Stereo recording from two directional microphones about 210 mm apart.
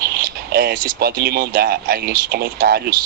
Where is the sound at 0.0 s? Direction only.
50° right (ahead or behind).